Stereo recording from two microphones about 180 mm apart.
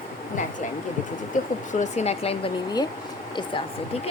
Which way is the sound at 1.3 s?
45° left (ahead or behind).